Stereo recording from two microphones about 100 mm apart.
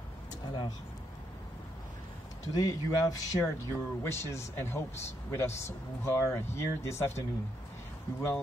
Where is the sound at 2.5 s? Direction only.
35° left (ahead or behind).